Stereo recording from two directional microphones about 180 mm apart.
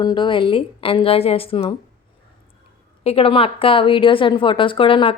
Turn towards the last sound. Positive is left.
turn(degrees=30)  # may be behind; listen again after turning